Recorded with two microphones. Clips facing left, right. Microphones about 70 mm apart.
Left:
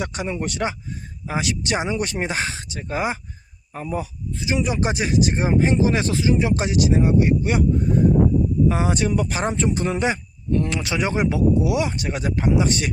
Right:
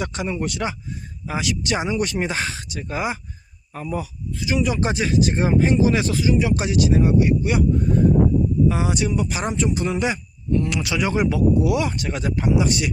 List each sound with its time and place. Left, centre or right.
0.0 s speech: left
9.4 s speech: left